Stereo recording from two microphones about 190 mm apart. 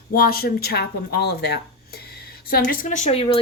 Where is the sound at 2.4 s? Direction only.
55° left (ahead or behind); by 3.4 s 35° left (ahead or behind).